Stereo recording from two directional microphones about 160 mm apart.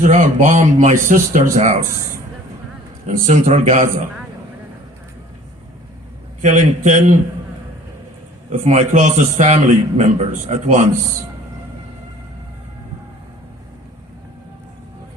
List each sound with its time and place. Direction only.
0.0 s a man's voice: 50° right (ahead or behind)
3.1 s a man's voice: 50° right (ahead or behind)
6.4 s a man's voice: 50° right (ahead or behind)
8.4 s a man's voice: 45° right (ahead or behind)